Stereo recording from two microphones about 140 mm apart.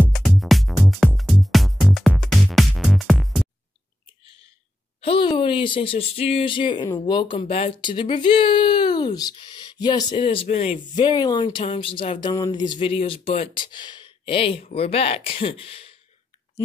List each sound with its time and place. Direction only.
0.1 s music: centre (ahead or behind)
5.0 s a sound: 40° left (ahead or behind)
5.3 s speech: 35° left (ahead or behind)
10.1 s speech: 45° left (ahead or behind)
11.0 s speech: 25° left (ahead or behind)
11.5 s speech: 40° left (ahead or behind)
13.7 s speech: 30° left (ahead or behind)